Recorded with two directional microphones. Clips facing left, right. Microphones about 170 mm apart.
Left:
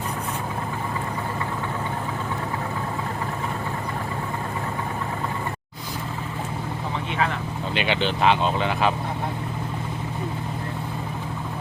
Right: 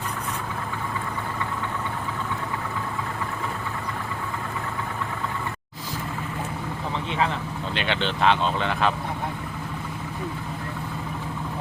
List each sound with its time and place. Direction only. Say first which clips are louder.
7.7 s speech: left 3 dB; 5° left (ahead or behind)